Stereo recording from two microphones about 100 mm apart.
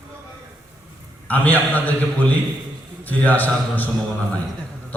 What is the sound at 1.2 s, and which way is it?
A man's voice, 15° left (ahead or behind).